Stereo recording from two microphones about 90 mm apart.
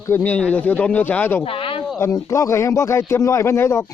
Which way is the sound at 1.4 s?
80° left.